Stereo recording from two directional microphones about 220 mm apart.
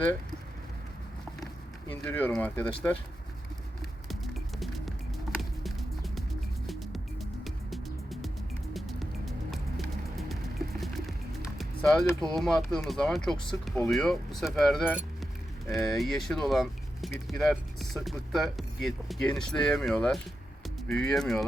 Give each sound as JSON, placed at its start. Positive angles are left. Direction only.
{"t": 1.9, "sound": "speech", "side_deg": 5}
{"t": 4.1, "sound": "music", "side_deg": 0}
{"t": 10.8, "sound": "bird", "side_deg": 0}
{"t": 11.5, "sound": "music", "side_deg": 0}
{"t": 12.0, "sound": "speech", "side_deg": 5}